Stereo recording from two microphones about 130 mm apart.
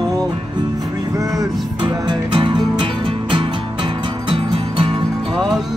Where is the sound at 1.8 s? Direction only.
40° right (ahead or behind).